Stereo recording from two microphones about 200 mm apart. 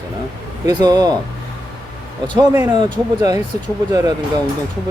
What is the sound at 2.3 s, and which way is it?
Speech, 15° right (ahead or behind).